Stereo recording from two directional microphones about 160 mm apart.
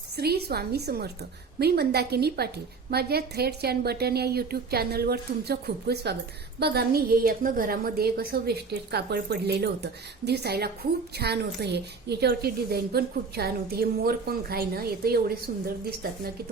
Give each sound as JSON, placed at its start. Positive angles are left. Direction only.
{"t": 0.2, "sound": "a woman's voice", "side_deg": -80}